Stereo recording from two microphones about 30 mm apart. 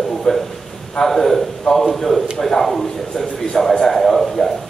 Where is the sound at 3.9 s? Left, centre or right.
Centre.